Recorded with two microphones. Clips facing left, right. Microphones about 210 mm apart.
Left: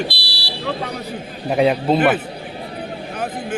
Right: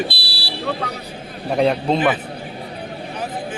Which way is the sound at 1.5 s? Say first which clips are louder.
Left 1 dB; 5° left (ahead or behind).